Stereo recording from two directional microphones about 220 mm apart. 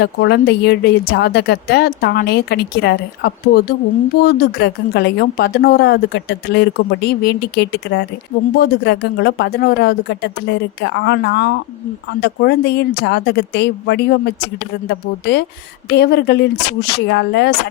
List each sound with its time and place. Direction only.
0.0 s a woman's voice: 50° left (ahead or behind)